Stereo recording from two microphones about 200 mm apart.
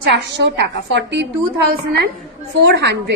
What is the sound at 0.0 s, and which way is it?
A woman's voice, 60° right (ahead or behind).